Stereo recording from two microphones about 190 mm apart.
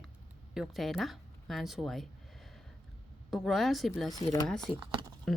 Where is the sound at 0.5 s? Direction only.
Centre (ahead or behind).